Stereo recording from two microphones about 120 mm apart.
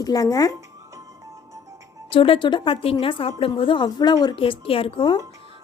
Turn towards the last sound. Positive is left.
turn(degrees=45)  # may be behind; listen again after turning